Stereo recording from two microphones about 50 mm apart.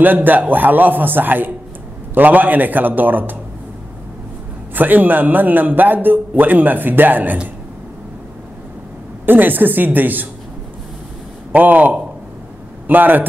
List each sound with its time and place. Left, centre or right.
0.0 s a man's voice: right
4.7 s a man's voice: right
9.2 s a man's voice: right
11.5 s a man's voice: right